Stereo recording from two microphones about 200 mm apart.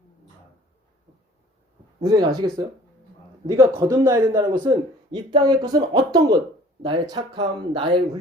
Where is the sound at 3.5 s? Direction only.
20° right (ahead or behind).